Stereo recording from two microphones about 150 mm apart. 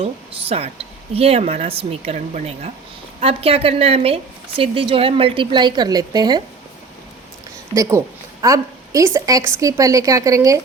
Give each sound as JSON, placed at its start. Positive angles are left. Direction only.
{"t": 0.0, "sound": "a woman's voice", "side_deg": -45}
{"t": 7.8, "sound": "a woman's voice", "side_deg": -20}